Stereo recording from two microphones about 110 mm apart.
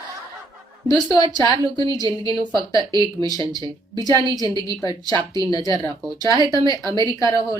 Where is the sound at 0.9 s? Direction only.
35° left (ahead or behind).